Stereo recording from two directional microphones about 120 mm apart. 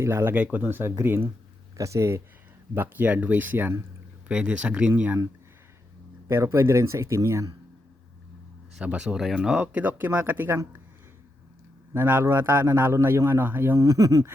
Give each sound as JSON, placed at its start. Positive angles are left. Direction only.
{"t": 0.0, "sound": "a man's voice", "side_deg": -20}
{"t": 6.2, "sound": "a man's voice", "side_deg": -25}
{"t": 8.7, "sound": "speech", "side_deg": -10}
{"t": 11.9, "sound": "a man's voice", "side_deg": -15}
{"t": 13.8, "sound": "speech", "side_deg": -30}